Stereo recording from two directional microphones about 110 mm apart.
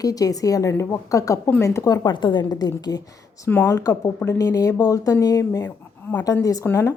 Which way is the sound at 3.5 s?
25° left (ahead or behind).